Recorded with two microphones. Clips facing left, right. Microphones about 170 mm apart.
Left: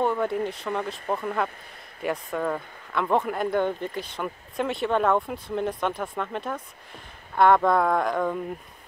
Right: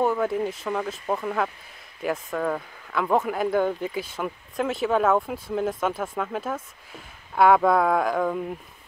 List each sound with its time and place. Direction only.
0.0 s speech: 5° right (ahead or behind)